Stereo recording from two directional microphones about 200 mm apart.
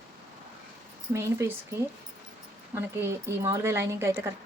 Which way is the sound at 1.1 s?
15° right (ahead or behind).